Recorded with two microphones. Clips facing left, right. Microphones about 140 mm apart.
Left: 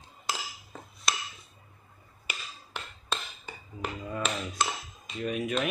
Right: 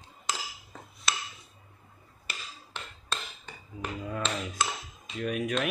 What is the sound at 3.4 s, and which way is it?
Hammer, 5° left (ahead or behind).